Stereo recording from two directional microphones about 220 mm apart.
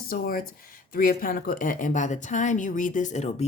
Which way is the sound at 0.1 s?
40° left (ahead or behind).